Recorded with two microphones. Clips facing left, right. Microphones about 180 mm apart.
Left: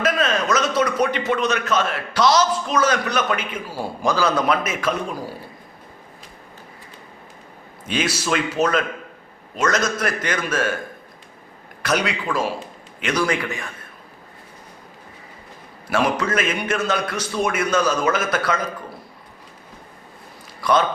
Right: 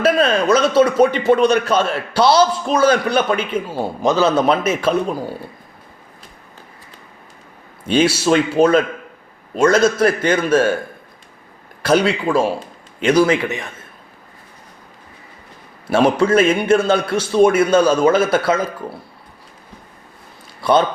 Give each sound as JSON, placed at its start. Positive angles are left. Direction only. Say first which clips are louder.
{"t": 0.0, "sound": "a man's voice", "louder": "right 6 dB", "side_deg": -30}
{"t": 7.9, "sound": "a man's voice", "louder": "right 8 dB", "side_deg": -30}
{"t": 11.8, "sound": "a man's voice", "louder": "right 7 dB", "side_deg": -30}
{"t": 15.9, "sound": "a man's voice", "louder": "right 7 dB", "side_deg": -25}
{"t": 20.6, "sound": "speech", "louder": "right 4 dB", "side_deg": -30}